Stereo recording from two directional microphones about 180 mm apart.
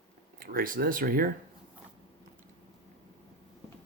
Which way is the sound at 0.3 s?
55° right (ahead or behind).